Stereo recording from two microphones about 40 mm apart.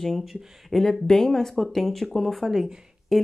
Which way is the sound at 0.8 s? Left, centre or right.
Centre.